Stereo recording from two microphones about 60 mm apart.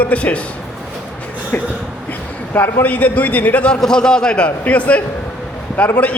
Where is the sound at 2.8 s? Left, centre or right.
Left.